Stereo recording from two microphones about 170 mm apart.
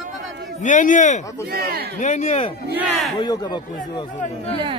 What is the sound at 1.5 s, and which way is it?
Speech, 65° right (ahead or behind).